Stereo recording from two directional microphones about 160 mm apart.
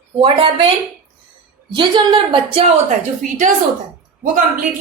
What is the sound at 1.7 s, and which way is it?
A woman's voice, 30° right (ahead or behind).